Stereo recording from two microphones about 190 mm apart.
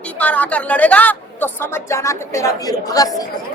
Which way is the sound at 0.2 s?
5° left (ahead or behind).